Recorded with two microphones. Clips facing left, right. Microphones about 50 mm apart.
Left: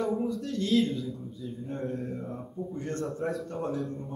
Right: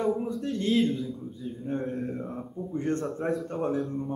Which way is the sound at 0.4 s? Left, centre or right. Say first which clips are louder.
Right 2 dB; right.